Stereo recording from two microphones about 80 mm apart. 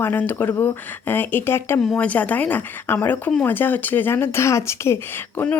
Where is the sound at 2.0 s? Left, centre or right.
Centre.